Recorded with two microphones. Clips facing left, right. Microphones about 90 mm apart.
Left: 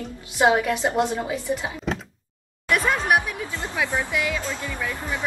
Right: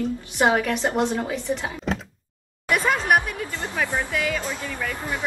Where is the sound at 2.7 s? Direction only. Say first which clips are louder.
Even; centre (ahead or behind).